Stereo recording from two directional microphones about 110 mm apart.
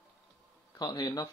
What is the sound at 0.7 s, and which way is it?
Speech, 35° left (ahead or behind).